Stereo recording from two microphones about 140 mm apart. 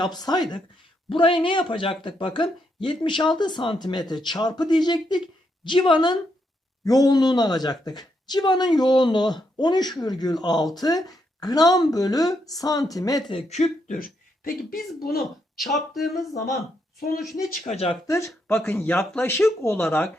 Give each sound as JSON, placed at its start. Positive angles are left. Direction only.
{"t": 0.0, "sound": "speech", "side_deg": 30}
{"t": 13.5, "sound": "speech", "side_deg": 60}
{"t": 15.2, "sound": "speech", "side_deg": 0}
{"t": 17.3, "sound": "speech", "side_deg": 80}
{"t": 18.0, "sound": "speech", "side_deg": 20}